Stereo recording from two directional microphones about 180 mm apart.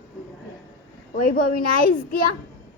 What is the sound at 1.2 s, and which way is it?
A woman's voice, 55° left (ahead or behind).